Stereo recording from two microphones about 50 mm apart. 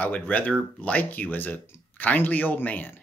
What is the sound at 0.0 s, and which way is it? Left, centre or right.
Speech, left.